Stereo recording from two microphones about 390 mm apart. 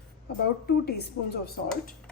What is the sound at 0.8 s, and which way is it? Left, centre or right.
Speech, left.